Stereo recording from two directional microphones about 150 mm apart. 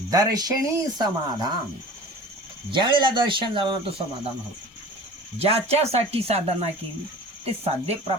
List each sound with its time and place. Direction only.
0.1 s speech: 25° right (ahead or behind)
2.6 s speech: 35° right (ahead or behind)
5.4 s speech: 45° right (ahead or behind)